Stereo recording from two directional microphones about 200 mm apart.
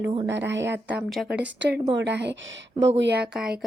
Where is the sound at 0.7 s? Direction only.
Centre (ahead or behind).